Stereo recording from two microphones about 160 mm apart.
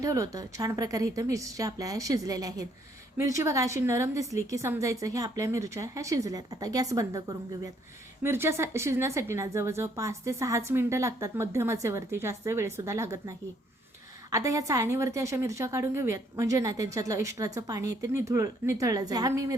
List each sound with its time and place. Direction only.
0.0 s a woman's voice: 20° right (ahead or behind)